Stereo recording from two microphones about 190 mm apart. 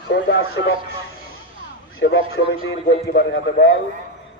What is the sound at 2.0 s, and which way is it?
Speech, 70° left (ahead or behind).